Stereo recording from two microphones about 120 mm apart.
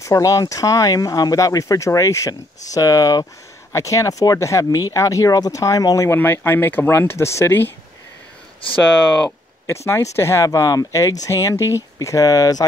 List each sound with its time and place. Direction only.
0.0 s speech: 25° left (ahead or behind)
8.9 s speech: 5° left (ahead or behind)
10.1 s speech: 20° left (ahead or behind)